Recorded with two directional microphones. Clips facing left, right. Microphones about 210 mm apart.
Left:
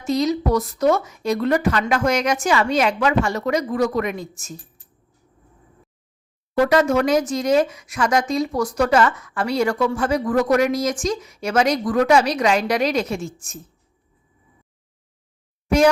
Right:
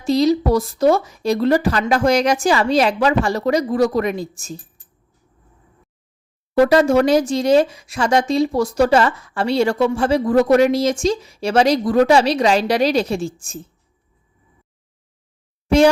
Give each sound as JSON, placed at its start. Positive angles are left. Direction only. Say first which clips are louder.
{"t": 0.0, "sound": "speech", "louder": "right 4 dB", "side_deg": -30}
{"t": 6.5, "sound": "speech", "louder": "right 4 dB", "side_deg": -30}